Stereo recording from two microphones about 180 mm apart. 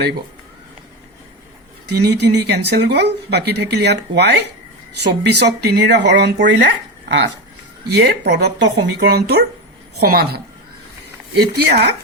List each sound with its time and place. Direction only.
1.9 s speech: 65° right (ahead or behind)
7.9 s speech: 70° right (ahead or behind)